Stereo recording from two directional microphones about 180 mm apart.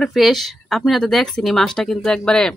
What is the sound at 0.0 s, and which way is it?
Speech, centre (ahead or behind).